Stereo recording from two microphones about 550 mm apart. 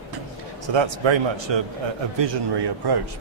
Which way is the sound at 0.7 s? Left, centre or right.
Right.